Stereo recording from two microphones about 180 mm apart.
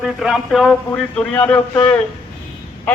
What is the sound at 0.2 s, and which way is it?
A man's voice, centre (ahead or behind).